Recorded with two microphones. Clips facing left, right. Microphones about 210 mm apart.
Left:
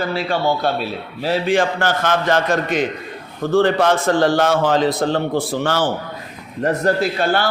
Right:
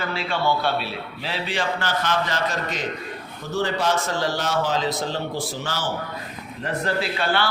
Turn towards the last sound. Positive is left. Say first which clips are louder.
# left 5 dB
turn(degrees=45)  # may be behind; listen again after turning